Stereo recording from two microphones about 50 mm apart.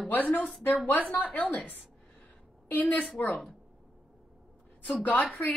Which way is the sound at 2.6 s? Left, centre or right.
Left.